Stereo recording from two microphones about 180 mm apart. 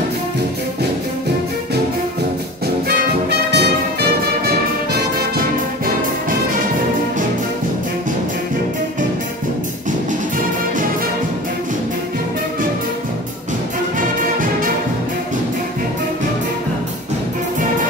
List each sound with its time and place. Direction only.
2.9 s music: 65° right (ahead or behind)
13.9 s music: 50° right (ahead or behind)